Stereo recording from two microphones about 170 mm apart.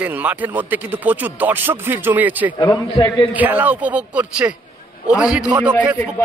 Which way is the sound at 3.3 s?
10° right (ahead or behind).